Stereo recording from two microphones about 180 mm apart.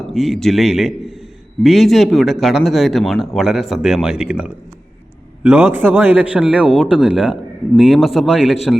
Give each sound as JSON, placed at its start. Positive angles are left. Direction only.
{"t": 0.1, "sound": "a man's voice", "side_deg": 0}